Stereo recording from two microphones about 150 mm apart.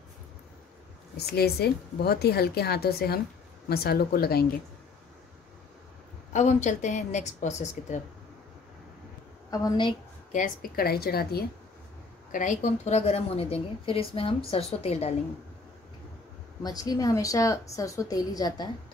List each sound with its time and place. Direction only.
1.1 s a woman's voice: 90° left
6.3 s speech: 50° left (ahead or behind)
9.5 s a woman's voice: 30° left (ahead or behind)
10.3 s a woman's voice: 65° left (ahead or behind); by 11.4 s 90° left
12.3 s a woman's voice: 55° left (ahead or behind)
16.6 s a woman's voice: 25° left (ahead or behind)